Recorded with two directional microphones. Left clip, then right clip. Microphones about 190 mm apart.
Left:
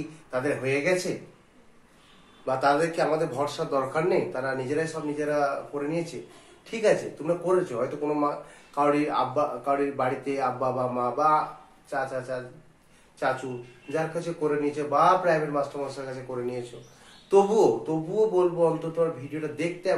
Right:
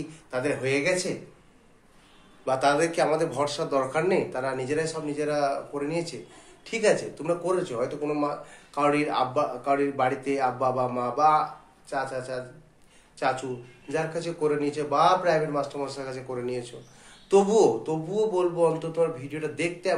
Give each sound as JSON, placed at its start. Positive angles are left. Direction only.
{"t": 0.3, "sound": "speech", "side_deg": -20}
{"t": 2.4, "sound": "speech", "side_deg": -25}
{"t": 13.8, "sound": "speech", "side_deg": -20}